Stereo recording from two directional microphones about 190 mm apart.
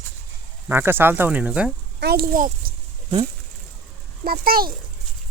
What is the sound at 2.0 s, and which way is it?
Speech, 55° right (ahead or behind).